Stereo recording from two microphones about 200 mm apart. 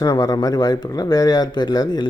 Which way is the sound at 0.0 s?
15° left (ahead or behind).